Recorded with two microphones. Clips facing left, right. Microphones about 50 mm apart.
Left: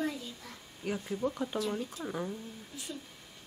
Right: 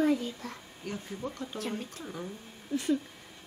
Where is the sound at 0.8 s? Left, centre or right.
Centre.